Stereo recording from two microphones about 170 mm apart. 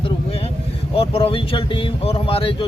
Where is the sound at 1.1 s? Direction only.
30° left (ahead or behind).